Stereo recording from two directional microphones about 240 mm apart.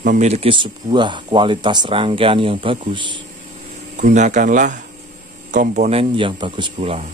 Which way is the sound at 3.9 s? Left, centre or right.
Right.